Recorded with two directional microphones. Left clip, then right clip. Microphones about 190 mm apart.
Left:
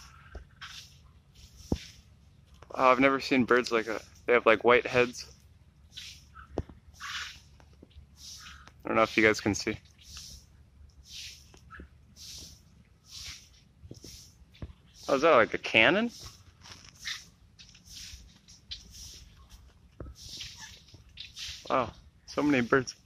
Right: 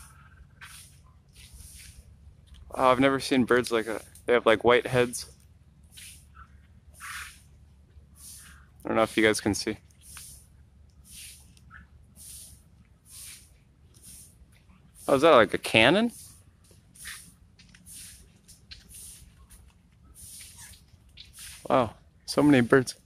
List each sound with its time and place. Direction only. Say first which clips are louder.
2.7 s speech: right 1 dB; 5° right (ahead or behind)
8.8 s speech: right 1 dB; 5° right (ahead or behind)
15.0 s speech: right 4 dB; 35° right (ahead or behind)
21.2 s a sound: left 4 dB; 65° right (ahead or behind)
21.6 s speech: right 5 dB; 35° right (ahead or behind)